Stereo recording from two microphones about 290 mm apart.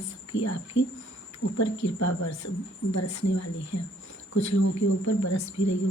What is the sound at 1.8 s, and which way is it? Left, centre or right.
Speech, left.